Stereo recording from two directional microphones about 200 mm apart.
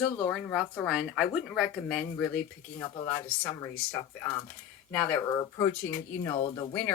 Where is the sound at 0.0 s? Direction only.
5° left (ahead or behind).